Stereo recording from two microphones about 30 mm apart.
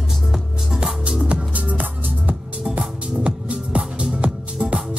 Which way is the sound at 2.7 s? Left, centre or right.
Right.